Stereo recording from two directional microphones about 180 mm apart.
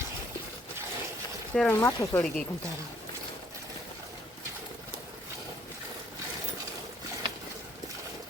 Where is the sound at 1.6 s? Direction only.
10° left (ahead or behind).